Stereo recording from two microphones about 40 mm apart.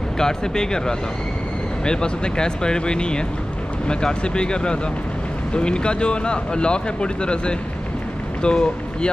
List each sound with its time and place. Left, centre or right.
0.2 s speech: centre